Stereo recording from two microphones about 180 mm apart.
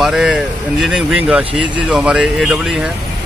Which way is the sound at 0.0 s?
5° right (ahead or behind).